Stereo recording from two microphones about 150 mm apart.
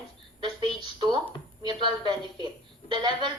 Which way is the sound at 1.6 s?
30° right (ahead or behind).